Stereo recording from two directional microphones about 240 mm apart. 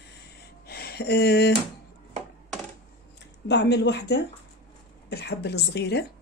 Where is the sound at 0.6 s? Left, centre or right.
Left.